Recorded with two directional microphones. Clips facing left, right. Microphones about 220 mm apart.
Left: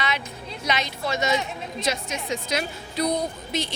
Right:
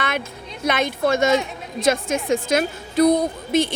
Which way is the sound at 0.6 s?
55° right (ahead or behind).